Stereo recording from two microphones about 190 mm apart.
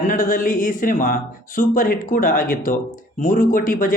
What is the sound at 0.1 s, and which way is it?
A man's voice, 45° left (ahead or behind).